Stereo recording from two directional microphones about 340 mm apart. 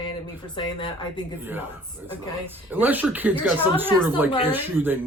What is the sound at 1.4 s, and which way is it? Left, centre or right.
Speech, centre.